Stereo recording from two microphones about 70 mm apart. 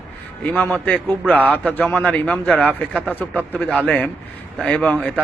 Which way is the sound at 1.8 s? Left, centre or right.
Centre.